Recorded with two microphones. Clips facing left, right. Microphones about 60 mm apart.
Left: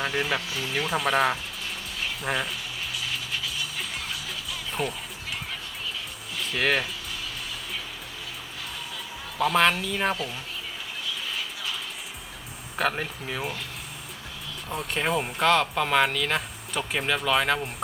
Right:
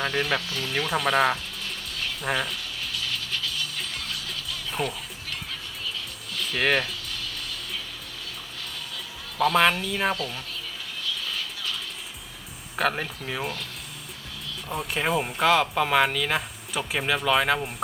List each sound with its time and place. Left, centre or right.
0.0 s speech: centre
2.2 s music: centre
4.7 s speech: centre
6.3 s music: centre
9.4 s speech: centre
11.0 s vehicle: centre
12.7 s speech: centre
14.7 s speech: centre